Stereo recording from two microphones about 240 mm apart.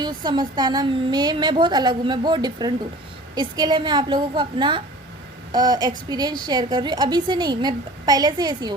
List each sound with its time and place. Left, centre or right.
0.0 s a woman's voice: centre